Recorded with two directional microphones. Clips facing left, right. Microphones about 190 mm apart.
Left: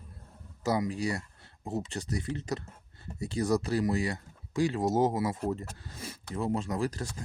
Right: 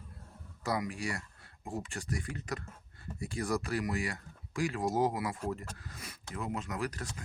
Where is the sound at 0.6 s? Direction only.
25° left (ahead or behind).